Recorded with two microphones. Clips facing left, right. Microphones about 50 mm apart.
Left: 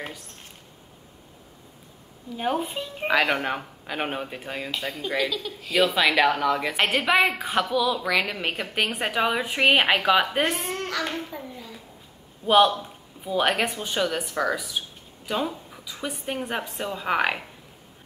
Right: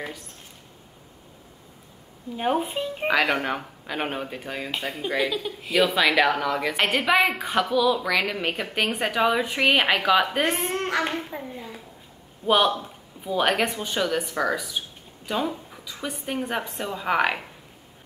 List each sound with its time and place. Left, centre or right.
2.3 s speech: centre
3.1 s speech: centre
4.9 s speech: centre
5.7 s a woman's voice: centre
10.5 s a child's voice: right
12.4 s speech: centre